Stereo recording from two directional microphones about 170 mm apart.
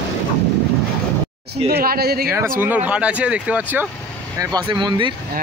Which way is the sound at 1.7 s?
65° right (ahead or behind).